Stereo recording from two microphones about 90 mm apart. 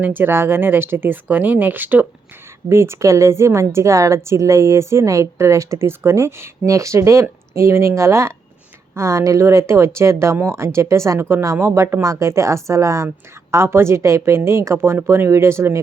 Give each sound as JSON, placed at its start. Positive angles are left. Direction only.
{"t": 0.0, "sound": "speech", "side_deg": -25}
{"t": 2.6, "sound": "a woman's voice", "side_deg": -30}